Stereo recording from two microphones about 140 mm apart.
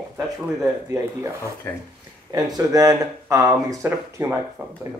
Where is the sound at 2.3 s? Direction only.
25° right (ahead or behind).